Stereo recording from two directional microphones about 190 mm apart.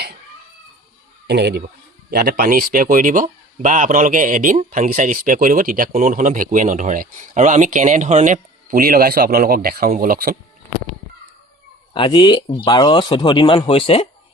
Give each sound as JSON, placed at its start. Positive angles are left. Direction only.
{"t": 1.3, "sound": "speech", "side_deg": -60}
{"t": 11.9, "sound": "speech", "side_deg": 25}